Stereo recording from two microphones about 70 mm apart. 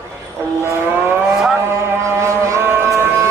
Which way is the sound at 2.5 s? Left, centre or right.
Right.